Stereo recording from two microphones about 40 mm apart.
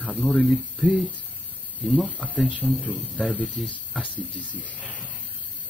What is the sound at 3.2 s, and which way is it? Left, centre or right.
Speech, right.